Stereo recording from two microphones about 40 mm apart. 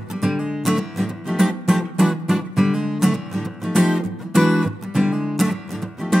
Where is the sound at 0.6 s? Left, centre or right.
Centre.